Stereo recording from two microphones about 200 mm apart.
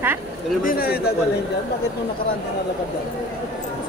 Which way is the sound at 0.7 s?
50° left (ahead or behind).